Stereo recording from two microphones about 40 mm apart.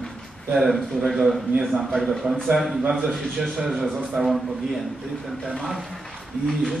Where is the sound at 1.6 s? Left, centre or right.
Centre.